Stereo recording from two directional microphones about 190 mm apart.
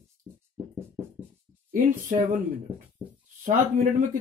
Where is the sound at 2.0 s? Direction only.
45° right (ahead or behind).